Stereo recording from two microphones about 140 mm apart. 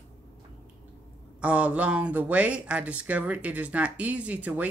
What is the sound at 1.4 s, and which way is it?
Speech, 10° right (ahead or behind).